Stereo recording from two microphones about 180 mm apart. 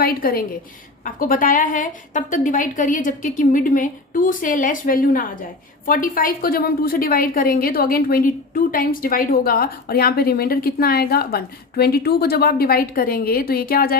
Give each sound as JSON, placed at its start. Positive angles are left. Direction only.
{"t": 0.0, "sound": "a woman's voice", "side_deg": 55}